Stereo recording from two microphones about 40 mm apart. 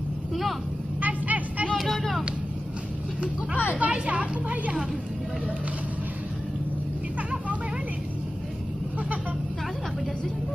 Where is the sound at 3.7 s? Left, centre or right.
Right.